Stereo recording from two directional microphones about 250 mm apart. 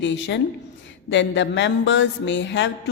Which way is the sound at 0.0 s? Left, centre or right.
Left.